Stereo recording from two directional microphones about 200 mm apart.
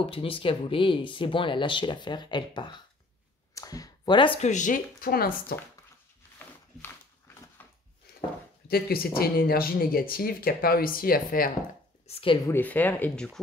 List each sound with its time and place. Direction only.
0.0 s speech: 25° left (ahead or behind); by 5.6 s 50° left (ahead or behind)
7.6 s a sound: 10° left (ahead or behind)
8.1 s a sound: 50° left (ahead or behind)
8.6 s speech: 50° left (ahead or behind)
12.1 s speech: 25° left (ahead or behind)
12.4 s speech: 10° left (ahead or behind)